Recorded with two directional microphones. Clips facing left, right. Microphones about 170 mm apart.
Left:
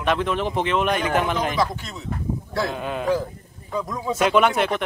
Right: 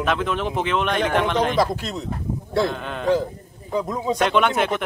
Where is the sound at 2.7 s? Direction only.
5° left (ahead or behind).